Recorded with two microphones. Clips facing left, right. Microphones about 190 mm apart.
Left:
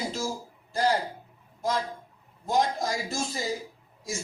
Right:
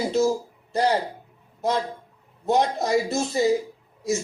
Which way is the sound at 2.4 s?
70° right (ahead or behind).